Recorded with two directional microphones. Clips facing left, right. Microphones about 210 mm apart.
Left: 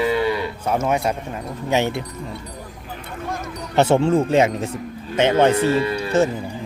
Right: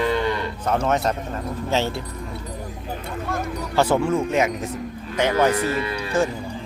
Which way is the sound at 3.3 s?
20° left (ahead or behind).